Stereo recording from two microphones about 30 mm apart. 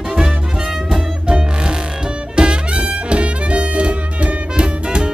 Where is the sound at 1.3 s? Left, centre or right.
Right.